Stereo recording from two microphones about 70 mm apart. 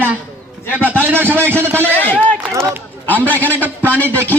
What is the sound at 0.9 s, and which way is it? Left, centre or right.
Speech, right.